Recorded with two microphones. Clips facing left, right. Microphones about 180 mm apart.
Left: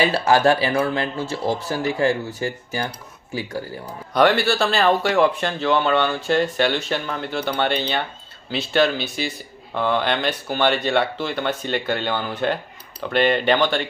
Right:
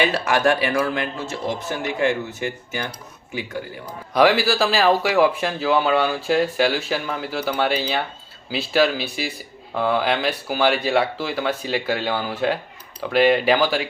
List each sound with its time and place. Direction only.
0.0 s speech: 30° left (ahead or behind)
4.1 s speech: centre (ahead or behind)